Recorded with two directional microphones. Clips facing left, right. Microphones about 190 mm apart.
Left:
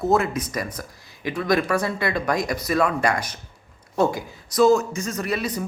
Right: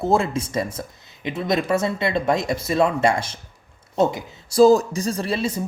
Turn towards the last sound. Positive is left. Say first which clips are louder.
# right 2 dB
turn(degrees=-30)  # may be behind; listen again after turning